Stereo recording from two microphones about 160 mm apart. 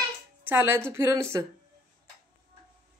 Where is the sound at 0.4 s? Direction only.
15° right (ahead or behind).